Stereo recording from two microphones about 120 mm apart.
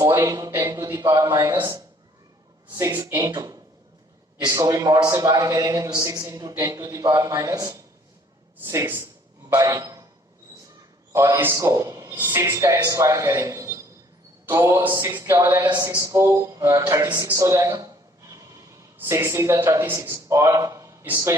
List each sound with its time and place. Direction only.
0.2 s a man's voice: 30° right (ahead or behind)
2.7 s a man's voice: 25° right (ahead or behind)
11.3 s a man's voice: 20° right (ahead or behind)
17.3 s a sound: 25° right (ahead or behind)
18.9 s a man's voice: 20° right (ahead or behind)